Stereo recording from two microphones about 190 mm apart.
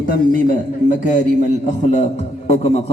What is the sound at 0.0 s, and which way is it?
A man's voice, 50° left (ahead or behind).